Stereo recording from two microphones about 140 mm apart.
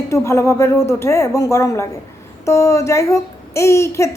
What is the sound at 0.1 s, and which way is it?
Speech, 20° left (ahead or behind).